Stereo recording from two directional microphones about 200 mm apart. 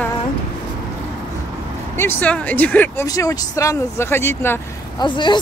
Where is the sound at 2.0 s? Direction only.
10° left (ahead or behind).